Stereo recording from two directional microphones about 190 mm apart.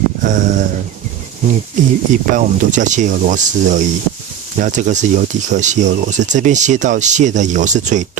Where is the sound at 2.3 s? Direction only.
40° right (ahead or behind).